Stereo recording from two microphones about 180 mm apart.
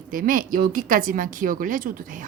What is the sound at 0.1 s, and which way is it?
Speech, 50° right (ahead or behind).